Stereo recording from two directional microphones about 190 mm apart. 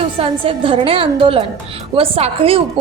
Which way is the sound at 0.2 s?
30° right (ahead or behind).